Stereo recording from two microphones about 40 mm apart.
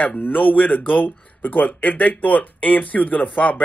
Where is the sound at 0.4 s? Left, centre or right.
Left.